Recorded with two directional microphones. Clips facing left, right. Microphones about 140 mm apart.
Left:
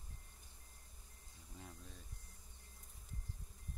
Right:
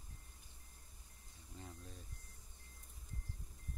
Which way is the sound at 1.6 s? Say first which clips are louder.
Right 2 dB; centre (ahead or behind).